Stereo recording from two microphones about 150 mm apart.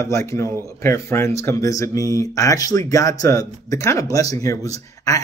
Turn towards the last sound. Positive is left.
turn(degrees=20)  # may be behind; listen again after turning